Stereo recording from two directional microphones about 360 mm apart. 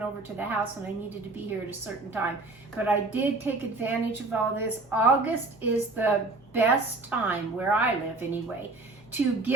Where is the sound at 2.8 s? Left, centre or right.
Centre.